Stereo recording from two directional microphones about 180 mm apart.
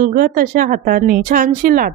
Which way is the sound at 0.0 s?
50° right (ahead or behind).